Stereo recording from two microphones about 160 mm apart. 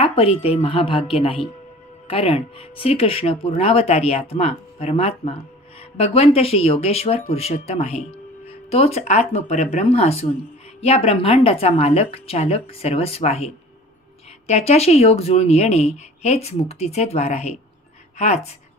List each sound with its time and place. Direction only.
0.0 s speech: 35° left (ahead or behind)
14.5 s a woman's voice: 40° left (ahead or behind)